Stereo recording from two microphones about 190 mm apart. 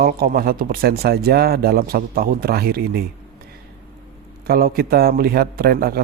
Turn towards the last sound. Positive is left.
turn(degrees=-55)  # may be behind; listen again after turning